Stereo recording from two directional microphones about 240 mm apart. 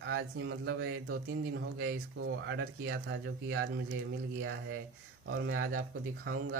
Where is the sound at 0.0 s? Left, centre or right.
Right.